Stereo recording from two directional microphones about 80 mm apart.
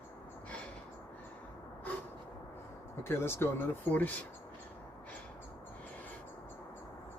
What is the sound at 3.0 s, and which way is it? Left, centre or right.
Speech, left.